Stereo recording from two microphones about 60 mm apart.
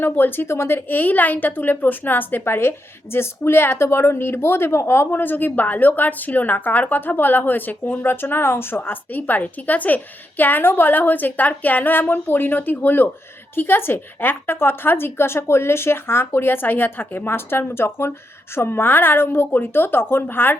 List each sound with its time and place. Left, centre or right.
0.0 s a woman's voice: left
5.1 s a woman's voice: left